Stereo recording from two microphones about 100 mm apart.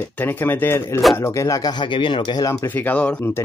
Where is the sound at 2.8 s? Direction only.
15° left (ahead or behind).